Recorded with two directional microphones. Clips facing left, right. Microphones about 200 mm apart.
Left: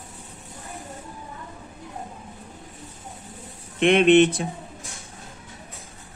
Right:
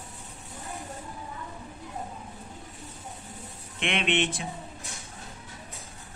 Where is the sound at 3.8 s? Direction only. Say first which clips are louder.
Left 12 dB; 40° left (ahead or behind).